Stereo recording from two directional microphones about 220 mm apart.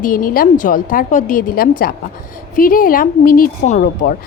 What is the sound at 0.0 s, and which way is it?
A woman's voice, 40° left (ahead or behind).